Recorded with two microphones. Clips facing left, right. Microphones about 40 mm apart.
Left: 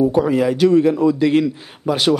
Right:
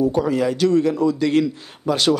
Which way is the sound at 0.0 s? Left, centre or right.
Centre.